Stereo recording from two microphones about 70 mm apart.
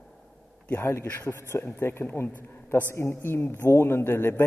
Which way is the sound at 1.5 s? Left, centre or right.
Left.